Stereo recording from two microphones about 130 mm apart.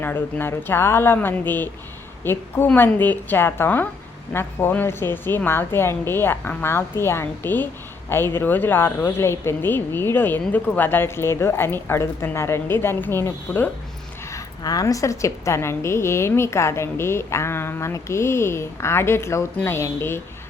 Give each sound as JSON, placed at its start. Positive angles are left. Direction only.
{"t": 0.0, "sound": "a woman's voice", "side_deg": 15}
{"t": 14.3, "sound": "a woman's voice", "side_deg": 30}